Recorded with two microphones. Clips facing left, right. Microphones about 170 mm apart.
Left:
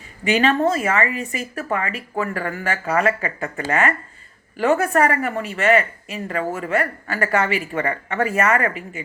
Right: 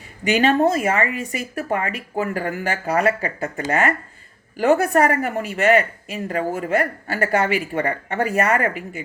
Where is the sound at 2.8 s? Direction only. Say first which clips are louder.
Right 1 dB; 40° right (ahead or behind).